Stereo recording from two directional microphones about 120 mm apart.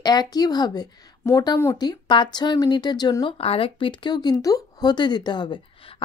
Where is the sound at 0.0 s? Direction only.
35° left (ahead or behind).